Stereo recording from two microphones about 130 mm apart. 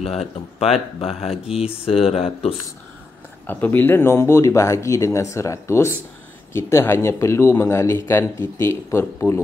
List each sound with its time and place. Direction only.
0.0 s speech: 50° left (ahead or behind)
3.4 s speech: 15° left (ahead or behind)